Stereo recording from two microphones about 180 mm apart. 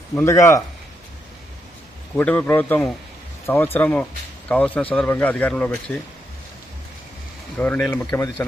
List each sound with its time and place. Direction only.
0.2 s a man's voice: 15° left (ahead or behind)
2.1 s a man's voice: 5° left (ahead or behind)
7.6 s a man's voice: 10° left (ahead or behind)